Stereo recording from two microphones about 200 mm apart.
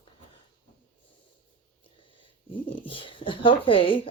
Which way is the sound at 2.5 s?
25° left (ahead or behind).